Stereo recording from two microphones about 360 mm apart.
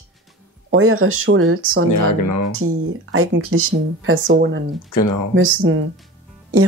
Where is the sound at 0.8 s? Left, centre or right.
Right.